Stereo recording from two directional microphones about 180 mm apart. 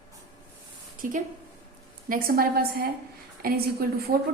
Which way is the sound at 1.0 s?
45° right (ahead or behind).